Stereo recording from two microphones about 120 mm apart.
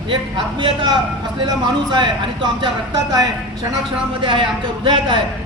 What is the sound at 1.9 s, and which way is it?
Speech, 40° right (ahead or behind).